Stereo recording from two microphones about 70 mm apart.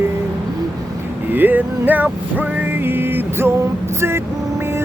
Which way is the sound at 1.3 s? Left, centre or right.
Right.